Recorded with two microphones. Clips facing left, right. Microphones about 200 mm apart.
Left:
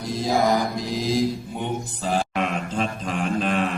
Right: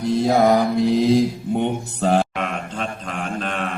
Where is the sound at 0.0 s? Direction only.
65° right (ahead or behind).